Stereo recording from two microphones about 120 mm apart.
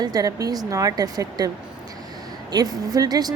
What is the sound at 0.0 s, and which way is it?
Speech, 30° right (ahead or behind).